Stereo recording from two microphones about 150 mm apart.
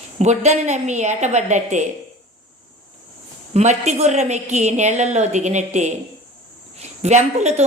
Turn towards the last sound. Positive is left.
turn(degrees=-50)  # may be behind; listen again after turning